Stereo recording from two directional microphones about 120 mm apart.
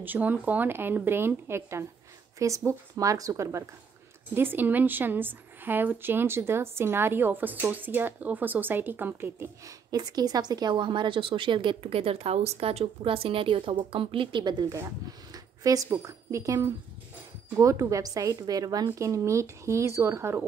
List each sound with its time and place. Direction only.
0.0 s a woman's voice: 15° right (ahead or behind)
9.8 s a woman's voice: 30° right (ahead or behind)
15.3 s a sound: 30° right (ahead or behind)
15.9 s a woman's voice: 25° right (ahead or behind)